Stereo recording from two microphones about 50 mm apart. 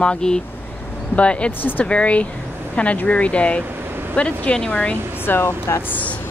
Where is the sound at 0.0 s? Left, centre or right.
Centre.